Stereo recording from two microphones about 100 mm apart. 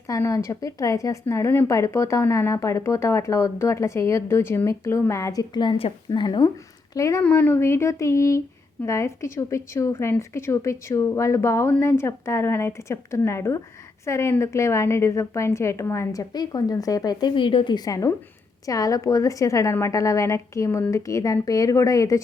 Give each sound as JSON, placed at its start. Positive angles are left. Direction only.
{"t": 0.1, "sound": "a woman's voice", "side_deg": 30}
{"t": 6.9, "sound": "a woman's voice", "side_deg": 35}
{"t": 7.2, "sound": "a woman's voice", "side_deg": 20}
{"t": 16.3, "sound": "a woman's voice", "side_deg": 40}